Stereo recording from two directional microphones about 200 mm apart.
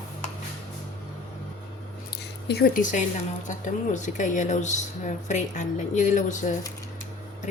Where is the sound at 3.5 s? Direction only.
40° left (ahead or behind).